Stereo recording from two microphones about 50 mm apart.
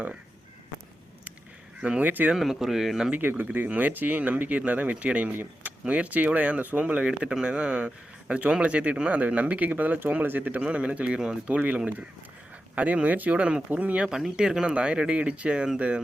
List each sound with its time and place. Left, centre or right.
2.0 s speech: right
2.3 s speech: centre
3.2 s speech: right
10.6 s speech: right
14.3 s speech: centre